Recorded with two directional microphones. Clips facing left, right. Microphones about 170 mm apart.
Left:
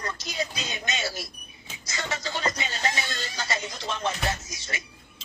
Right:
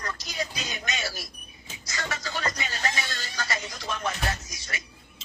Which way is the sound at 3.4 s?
25° left (ahead or behind).